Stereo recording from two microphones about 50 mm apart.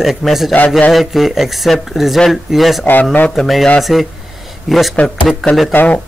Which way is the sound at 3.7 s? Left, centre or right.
Centre.